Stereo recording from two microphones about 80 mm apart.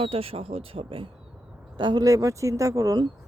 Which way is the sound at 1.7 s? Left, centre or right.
Right.